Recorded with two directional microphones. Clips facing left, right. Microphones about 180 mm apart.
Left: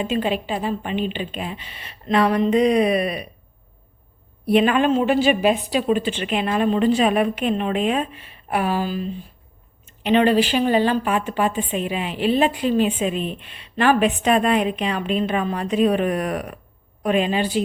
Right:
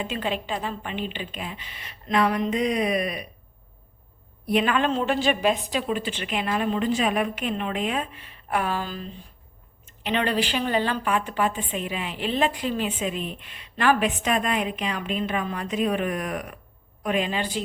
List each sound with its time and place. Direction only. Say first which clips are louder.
0.0 s a woman's voice: left 6 dB; 15° left (ahead or behind); by 3.2 s 30° left (ahead or behind)
4.4 s a woman's voice: left 6 dB; 25° left (ahead or behind)
8.4 s a woman's voice: left 5 dB; 15° left (ahead or behind); by 17.2 s 30° left (ahead or behind)
17.2 s a woman's voice: left 6 dB; 15° left (ahead or behind)